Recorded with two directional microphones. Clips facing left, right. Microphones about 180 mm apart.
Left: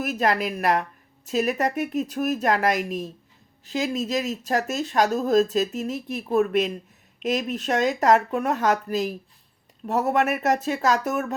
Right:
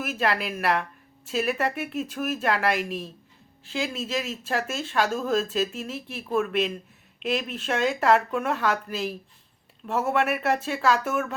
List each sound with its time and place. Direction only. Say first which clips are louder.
0.0 s speech: left 3 dB; 40° left (ahead or behind)